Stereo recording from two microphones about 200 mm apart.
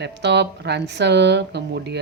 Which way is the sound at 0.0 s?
60° right (ahead or behind).